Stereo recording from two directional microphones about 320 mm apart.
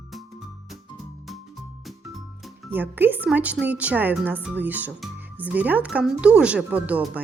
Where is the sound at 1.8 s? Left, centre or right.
Centre.